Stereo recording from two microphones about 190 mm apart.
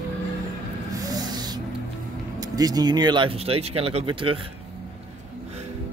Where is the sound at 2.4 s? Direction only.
20° right (ahead or behind).